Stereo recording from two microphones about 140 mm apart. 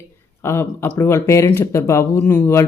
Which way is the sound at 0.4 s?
20° left (ahead or behind).